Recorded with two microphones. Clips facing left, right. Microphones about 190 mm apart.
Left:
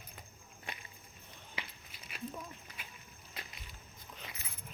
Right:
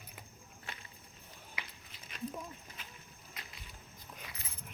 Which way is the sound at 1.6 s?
30° left (ahead or behind).